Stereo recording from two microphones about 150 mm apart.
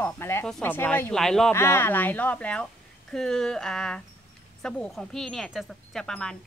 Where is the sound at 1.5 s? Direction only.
15° left (ahead or behind).